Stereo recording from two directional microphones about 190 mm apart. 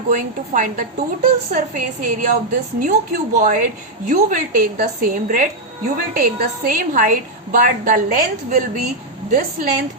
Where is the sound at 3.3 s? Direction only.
45° right (ahead or behind).